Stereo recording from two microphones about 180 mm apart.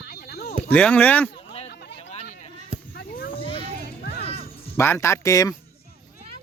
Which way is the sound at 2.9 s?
55° left (ahead or behind).